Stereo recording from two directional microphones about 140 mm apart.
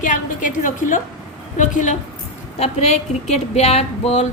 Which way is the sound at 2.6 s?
50° left (ahead or behind).